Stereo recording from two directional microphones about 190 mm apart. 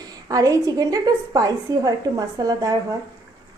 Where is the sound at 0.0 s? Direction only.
20° right (ahead or behind).